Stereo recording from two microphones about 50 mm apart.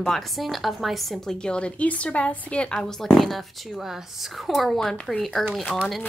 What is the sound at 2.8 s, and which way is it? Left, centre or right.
A woman's voice, centre.